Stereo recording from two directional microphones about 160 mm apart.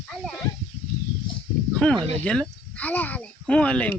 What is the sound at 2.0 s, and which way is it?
Speech, 40° right (ahead or behind).